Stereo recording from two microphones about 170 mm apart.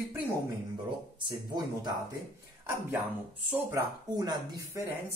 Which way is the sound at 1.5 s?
25° right (ahead or behind).